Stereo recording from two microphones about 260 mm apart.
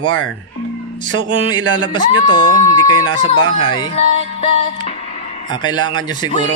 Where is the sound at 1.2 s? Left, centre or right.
Centre.